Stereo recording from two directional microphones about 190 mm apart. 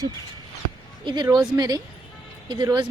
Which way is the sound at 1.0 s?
20° right (ahead or behind).